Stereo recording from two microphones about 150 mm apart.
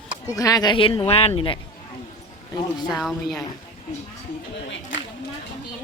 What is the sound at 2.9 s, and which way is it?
Speech, centre (ahead or behind).